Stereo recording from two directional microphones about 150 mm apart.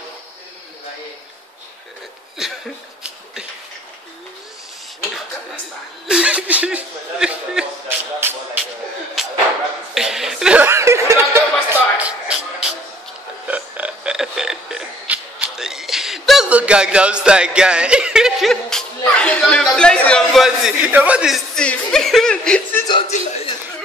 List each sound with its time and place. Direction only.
2.4 s a sound: 5° right (ahead or behind)
6.0 s speech: 5° right (ahead or behind)
9.2 s a sound: centre (ahead or behind)
9.9 s speech: 5° right (ahead or behind)
10.7 s music: 20° right (ahead or behind)
13.5 s burping: 10° right (ahead or behind)
21.5 s speech: 5° left (ahead or behind)
23.0 s a man's voice: 45° left (ahead or behind)